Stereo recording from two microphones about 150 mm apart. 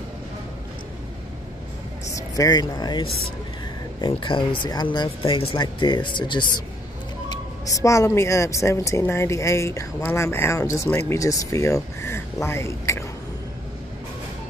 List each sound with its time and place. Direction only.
2.0 s speech: 20° left (ahead or behind)
7.2 s speech: 20° left (ahead or behind)